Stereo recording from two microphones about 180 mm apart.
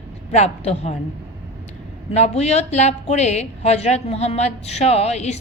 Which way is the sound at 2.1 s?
35° left (ahead or behind).